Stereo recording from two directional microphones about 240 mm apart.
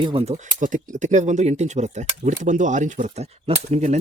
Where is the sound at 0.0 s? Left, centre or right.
Right.